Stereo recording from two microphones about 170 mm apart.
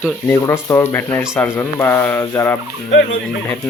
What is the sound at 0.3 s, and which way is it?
Speech, 15° left (ahead or behind).